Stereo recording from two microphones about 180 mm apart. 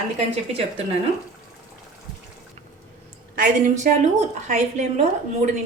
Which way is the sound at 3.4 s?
45° right (ahead or behind).